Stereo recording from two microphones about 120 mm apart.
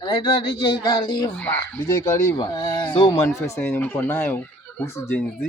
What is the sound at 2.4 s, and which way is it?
Speech, 35° left (ahead or behind).